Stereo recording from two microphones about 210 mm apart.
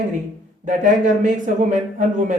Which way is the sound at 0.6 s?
35° right (ahead or behind).